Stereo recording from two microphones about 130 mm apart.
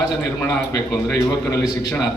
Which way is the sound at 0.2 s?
20° left (ahead or behind).